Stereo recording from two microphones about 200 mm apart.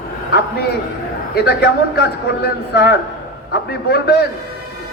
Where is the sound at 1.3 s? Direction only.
55° left (ahead or behind).